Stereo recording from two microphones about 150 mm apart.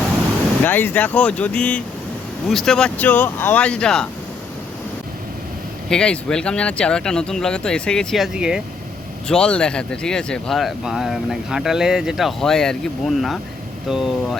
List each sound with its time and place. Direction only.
0.6 s speech: 15° left (ahead or behind)
5.9 s speech: 5° left (ahead or behind)